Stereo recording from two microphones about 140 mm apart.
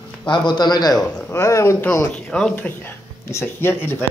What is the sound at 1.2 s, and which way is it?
Speech, 20° left (ahead or behind).